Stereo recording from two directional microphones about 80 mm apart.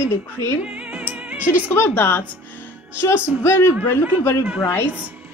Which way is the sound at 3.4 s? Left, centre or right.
Left.